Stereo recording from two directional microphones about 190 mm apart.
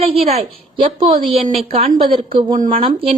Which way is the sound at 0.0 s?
30° right (ahead or behind).